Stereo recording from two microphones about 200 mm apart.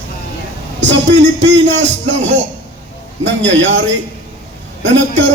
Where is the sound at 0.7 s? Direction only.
65° right (ahead or behind).